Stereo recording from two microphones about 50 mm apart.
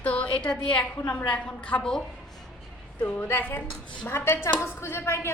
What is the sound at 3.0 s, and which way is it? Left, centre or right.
Speech, left.